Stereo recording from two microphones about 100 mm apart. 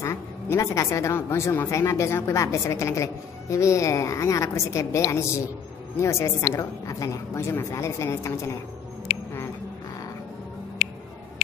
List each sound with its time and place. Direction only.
0.0 s a woman's voice: 30° left (ahead or behind)